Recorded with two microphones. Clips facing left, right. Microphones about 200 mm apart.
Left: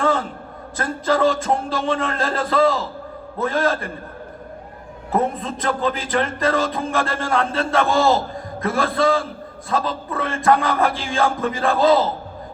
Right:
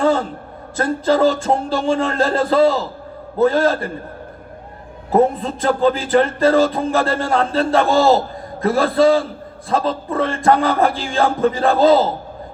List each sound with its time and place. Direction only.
0.0 s speech: 35° right (ahead or behind)
5.1 s speech: 30° right (ahead or behind)